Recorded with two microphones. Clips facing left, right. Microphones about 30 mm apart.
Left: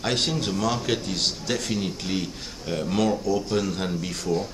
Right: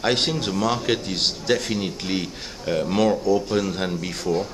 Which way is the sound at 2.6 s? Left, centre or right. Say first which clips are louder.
Right 4 dB; right.